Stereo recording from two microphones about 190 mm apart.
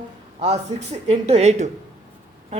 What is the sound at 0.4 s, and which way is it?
Speech, 35° right (ahead or behind).